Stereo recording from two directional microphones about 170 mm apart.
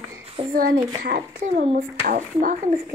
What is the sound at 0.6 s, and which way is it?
Speech, 70° right (ahead or behind).